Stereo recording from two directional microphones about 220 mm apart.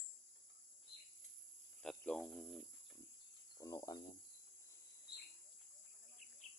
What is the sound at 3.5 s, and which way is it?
Speech, 15° left (ahead or behind).